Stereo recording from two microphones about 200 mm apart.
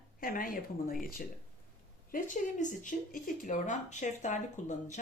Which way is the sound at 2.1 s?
40° left (ahead or behind).